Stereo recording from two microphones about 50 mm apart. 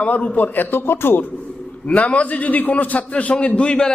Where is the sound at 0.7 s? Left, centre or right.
Left.